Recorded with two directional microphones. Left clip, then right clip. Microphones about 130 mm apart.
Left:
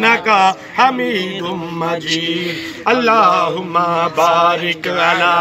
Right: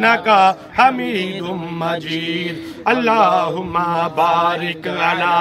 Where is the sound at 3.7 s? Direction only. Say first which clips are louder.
Left 3 dB; 35° right (ahead or behind).